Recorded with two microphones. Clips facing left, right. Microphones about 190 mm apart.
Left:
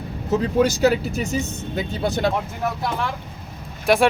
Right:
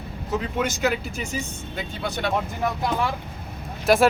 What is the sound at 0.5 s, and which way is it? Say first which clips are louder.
Speech: left 8 dB; 35° left (ahead or behind).